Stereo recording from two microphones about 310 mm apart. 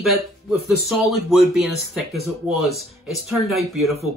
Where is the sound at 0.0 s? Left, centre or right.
Centre.